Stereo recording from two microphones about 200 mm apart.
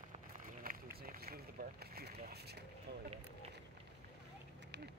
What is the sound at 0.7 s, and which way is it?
Run, 45° right (ahead or behind).